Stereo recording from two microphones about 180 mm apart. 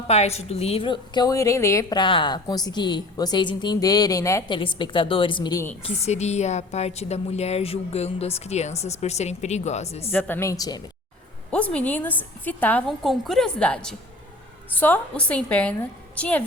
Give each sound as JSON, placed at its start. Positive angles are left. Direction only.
{"t": 0.1, "sound": "a woman's voice", "side_deg": 35}
{"t": 5.8, "sound": "a woman's voice", "side_deg": 40}
{"t": 10.1, "sound": "a woman's voice", "side_deg": 10}
{"t": 11.5, "sound": "a woman's voice", "side_deg": 5}